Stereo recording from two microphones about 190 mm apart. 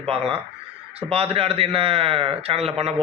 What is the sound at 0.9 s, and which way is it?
A man's voice, 30° right (ahead or behind).